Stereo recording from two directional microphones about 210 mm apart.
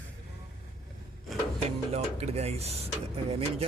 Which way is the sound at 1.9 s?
30° right (ahead or behind).